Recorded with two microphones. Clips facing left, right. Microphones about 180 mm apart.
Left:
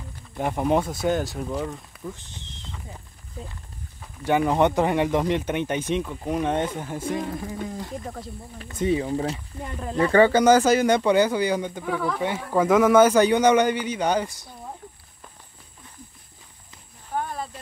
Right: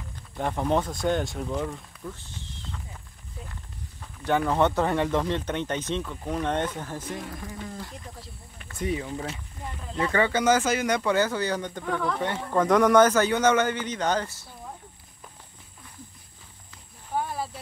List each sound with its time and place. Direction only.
0.4 s speech: 10° left (ahead or behind)
2.1 s horse: 20° left (ahead or behind)
4.2 s speech: 10° left (ahead or behind)
7.2 s a sound: 25° left (ahead or behind)
9.0 s speech: 35° left (ahead or behind)
9.8 s speech: 55° left (ahead or behind)
10.1 s speech: 35° left (ahead or behind); by 14.5 s 15° left (ahead or behind)
17.1 s snake: 5° right (ahead or behind)